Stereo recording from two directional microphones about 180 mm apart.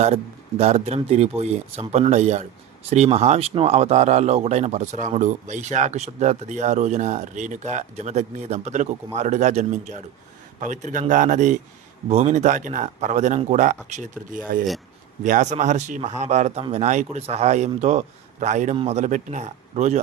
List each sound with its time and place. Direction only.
0.0 s speech: 35° right (ahead or behind)